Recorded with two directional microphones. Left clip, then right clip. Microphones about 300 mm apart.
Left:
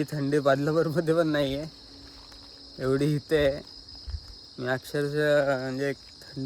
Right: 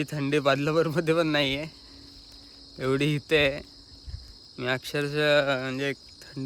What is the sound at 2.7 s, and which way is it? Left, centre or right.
Cricket, centre.